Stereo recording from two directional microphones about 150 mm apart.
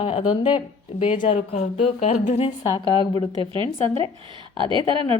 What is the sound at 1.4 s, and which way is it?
Speech, 50° left (ahead or behind).